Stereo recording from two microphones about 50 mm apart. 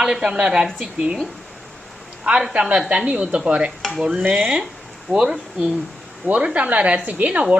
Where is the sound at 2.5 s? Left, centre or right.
Right.